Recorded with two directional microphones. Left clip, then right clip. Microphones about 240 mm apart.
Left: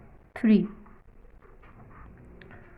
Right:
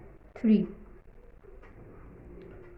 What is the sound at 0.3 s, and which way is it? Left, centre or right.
Speech, left.